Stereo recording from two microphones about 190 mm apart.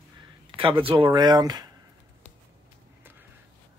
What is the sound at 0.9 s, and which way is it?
Speech, 25° right (ahead or behind).